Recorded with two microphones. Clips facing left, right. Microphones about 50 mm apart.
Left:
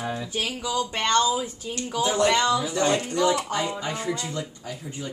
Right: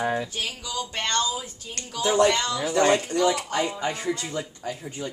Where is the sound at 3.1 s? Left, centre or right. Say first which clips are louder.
Even; centre.